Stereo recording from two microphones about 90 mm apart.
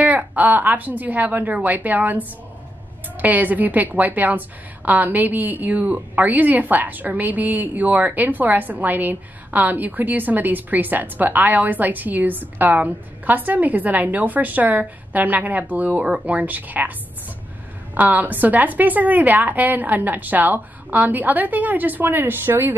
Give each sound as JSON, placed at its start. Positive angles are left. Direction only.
{"t": 0.0, "sound": "a woman's voice", "side_deg": -20}
{"t": 3.2, "sound": "a woman's voice", "side_deg": -20}
{"t": 17.9, "sound": "a woman's voice", "side_deg": -20}